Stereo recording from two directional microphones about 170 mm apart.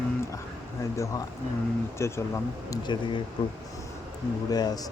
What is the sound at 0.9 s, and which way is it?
Speech, 15° left (ahead or behind).